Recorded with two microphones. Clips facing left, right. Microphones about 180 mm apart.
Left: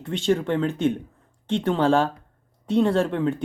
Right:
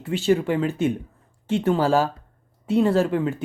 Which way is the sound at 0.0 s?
5° right (ahead or behind).